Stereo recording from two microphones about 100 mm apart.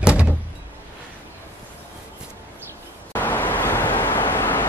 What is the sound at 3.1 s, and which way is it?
Vehicle, 20° left (ahead or behind).